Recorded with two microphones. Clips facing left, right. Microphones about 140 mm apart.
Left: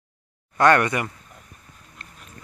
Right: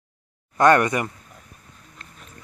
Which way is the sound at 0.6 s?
20° right (ahead or behind).